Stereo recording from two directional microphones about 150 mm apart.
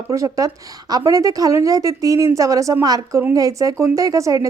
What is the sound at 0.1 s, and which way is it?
A woman's voice, 20° right (ahead or behind).